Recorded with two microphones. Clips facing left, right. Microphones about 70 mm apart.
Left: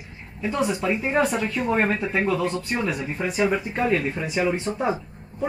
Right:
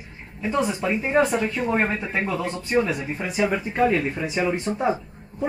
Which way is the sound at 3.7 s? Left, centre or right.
Centre.